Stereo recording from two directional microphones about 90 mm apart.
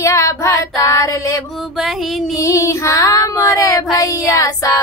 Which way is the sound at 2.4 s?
35° left (ahead or behind).